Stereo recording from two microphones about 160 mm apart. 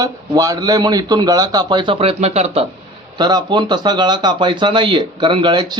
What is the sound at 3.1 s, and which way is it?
Speech, 30° right (ahead or behind).